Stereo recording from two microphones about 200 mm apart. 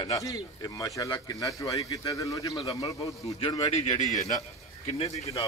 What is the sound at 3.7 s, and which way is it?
Speech, 35° left (ahead or behind).